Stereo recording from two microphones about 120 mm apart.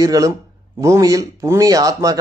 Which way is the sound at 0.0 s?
30° right (ahead or behind).